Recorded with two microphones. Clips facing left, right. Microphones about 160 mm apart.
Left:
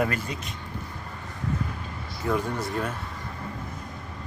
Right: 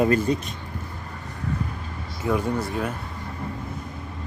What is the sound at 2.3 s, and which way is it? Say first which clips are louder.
Speech: right 2 dB; 10° right (ahead or behind).